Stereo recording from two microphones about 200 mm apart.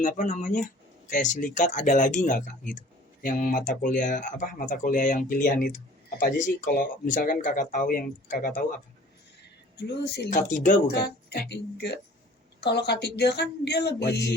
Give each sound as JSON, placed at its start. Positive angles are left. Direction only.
{"t": 0.0, "sound": "speech", "side_deg": 40}
{"t": 9.7, "sound": "speech", "side_deg": 55}
{"t": 10.2, "sound": "speech", "side_deg": 40}